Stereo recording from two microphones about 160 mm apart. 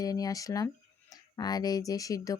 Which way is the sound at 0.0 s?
25° left (ahead or behind).